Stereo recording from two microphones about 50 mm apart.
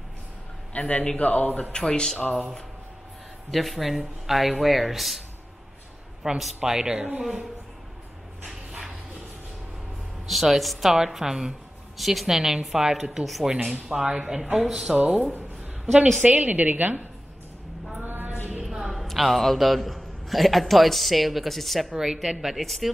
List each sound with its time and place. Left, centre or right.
0.7 s speech: left
1.6 s speech: centre
3.5 s speech: centre
6.2 s speech: centre
6.6 s speech: centre
10.2 s speech: centre
13.9 s speech: centre
15.0 s a woman's voice: right
18.0 s a sound: right
18.6 s a man's voice: centre